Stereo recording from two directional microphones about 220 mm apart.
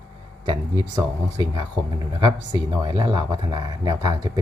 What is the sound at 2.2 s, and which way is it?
Speech, 20° right (ahead or behind).